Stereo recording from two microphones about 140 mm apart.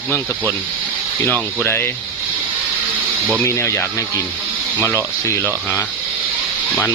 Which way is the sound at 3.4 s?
20° left (ahead or behind).